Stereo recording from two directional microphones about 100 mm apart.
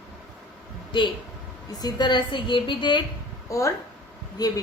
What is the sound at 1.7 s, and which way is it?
A woman's voice, 40° left (ahead or behind).